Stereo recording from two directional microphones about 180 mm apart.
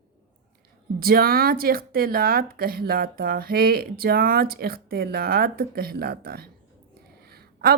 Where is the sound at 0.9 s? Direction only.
55° right (ahead or behind).